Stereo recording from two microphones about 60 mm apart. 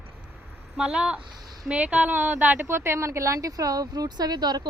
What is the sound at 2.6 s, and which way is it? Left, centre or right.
A woman's voice, right.